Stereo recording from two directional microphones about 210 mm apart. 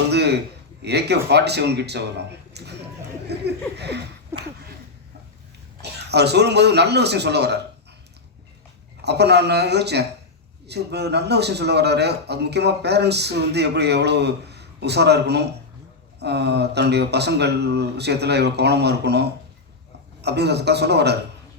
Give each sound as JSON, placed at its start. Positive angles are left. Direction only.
{"t": 0.1, "sound": "a sound", "side_deg": -50}
{"t": 0.9, "sound": "a man's voice", "side_deg": -50}
{"t": 3.2, "sound": "laughter", "side_deg": -50}
{"t": 4.3, "sound": "a sound", "side_deg": -10}
{"t": 5.8, "sound": "a man's voice", "side_deg": -50}
{"t": 9.0, "sound": "a man's voice", "side_deg": -50}